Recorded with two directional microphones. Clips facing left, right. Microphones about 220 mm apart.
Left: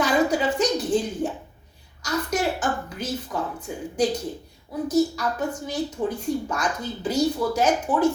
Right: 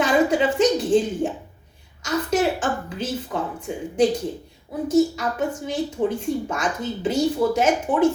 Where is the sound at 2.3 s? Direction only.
25° right (ahead or behind).